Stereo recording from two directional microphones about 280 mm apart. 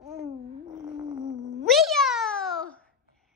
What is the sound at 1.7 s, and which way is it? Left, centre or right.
Meow, centre.